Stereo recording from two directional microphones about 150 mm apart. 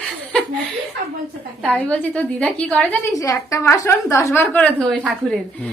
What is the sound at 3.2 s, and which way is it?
A woman's voice, 20° left (ahead or behind).